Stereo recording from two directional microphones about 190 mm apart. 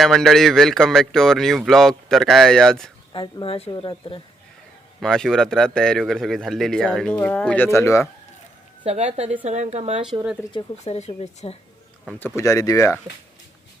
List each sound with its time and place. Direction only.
0.0 s a man's voice: centre (ahead or behind)
3.1 s speech: 25° left (ahead or behind)
4.9 s a man's voice: centre (ahead or behind)
8.8 s speech: 35° right (ahead or behind)
10.5 s speech: 35° left (ahead or behind)
12.4 s speech: 20° left (ahead or behind)